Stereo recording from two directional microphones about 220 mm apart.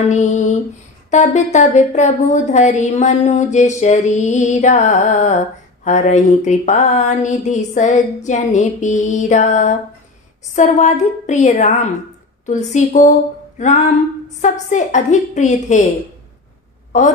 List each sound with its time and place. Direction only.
0.1 s speech: 30° left (ahead or behind)